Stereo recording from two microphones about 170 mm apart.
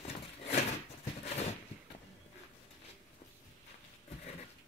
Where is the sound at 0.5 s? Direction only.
40° left (ahead or behind).